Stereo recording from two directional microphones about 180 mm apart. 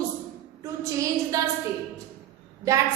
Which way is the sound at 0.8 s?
20° right (ahead or behind).